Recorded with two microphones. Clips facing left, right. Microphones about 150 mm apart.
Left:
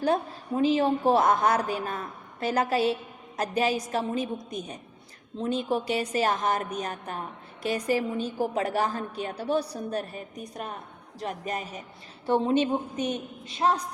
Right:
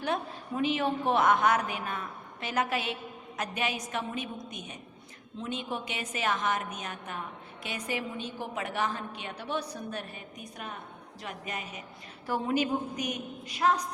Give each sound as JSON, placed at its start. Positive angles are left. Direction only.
{"t": 0.0, "sound": "a woman's voice", "side_deg": 35}
{"t": 12.2, "sound": "a woman's voice", "side_deg": 25}